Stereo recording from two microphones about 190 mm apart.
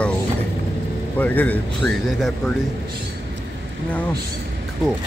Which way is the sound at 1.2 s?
10° left (ahead or behind).